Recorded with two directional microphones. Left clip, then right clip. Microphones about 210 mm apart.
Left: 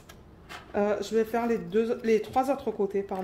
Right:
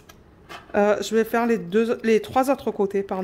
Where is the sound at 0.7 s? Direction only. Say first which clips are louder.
Right 7 dB; 45° right (ahead or behind).